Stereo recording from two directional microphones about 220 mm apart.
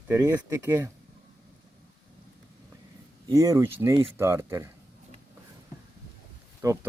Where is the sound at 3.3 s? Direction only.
15° right (ahead or behind).